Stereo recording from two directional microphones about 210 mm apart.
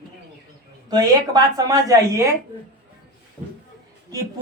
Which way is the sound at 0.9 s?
20° right (ahead or behind).